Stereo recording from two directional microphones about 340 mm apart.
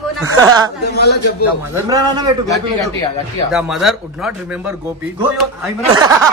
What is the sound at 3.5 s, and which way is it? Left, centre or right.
Speech, centre.